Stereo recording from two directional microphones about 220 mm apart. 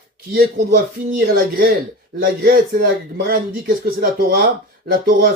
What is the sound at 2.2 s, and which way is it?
Speech, 40° right (ahead or behind).